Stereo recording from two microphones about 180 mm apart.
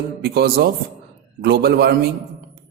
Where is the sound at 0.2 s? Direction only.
60° right (ahead or behind).